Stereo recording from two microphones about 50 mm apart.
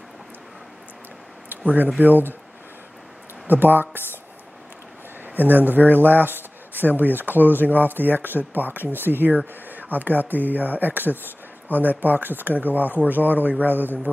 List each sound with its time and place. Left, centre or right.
1.5 s speech: right
3.4 s speech: right
5.2 s speech: right